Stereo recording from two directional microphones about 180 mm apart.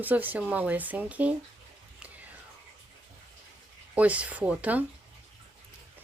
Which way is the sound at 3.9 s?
5° right (ahead or behind).